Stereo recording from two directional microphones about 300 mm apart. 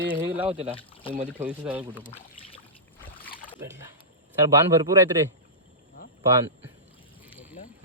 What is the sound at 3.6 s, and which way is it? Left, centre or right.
Speech, centre.